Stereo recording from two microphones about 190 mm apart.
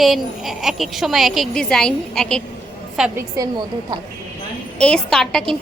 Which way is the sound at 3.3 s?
20° right (ahead or behind).